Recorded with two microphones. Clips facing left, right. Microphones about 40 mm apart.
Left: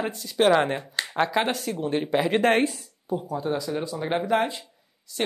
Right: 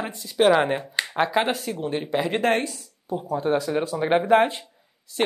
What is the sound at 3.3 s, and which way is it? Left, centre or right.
A woman's voice, right.